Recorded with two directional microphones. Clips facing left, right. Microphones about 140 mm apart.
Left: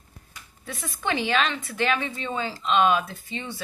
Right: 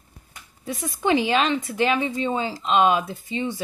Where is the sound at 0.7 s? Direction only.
20° right (ahead or behind).